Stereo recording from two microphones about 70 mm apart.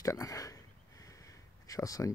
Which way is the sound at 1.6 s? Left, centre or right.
Left.